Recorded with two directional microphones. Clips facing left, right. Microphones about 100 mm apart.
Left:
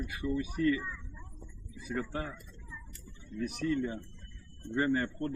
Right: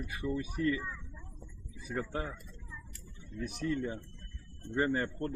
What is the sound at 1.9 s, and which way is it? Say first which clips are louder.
Speech: even; 20° right (ahead or behind).